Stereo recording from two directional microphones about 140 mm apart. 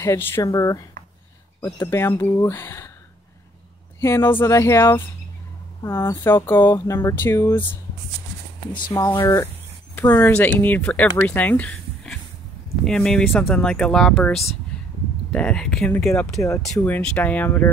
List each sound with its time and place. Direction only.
0.0 s speech: 20° left (ahead or behind)
4.0 s speech: 15° left (ahead or behind)
9.2 s speech: 15° left (ahead or behind)
14.7 s a sound: 5° left (ahead or behind)
15.3 s speech: 5° left (ahead or behind)
16.3 s speech: 20° left (ahead or behind)
16.6 s speech: 10° left (ahead or behind)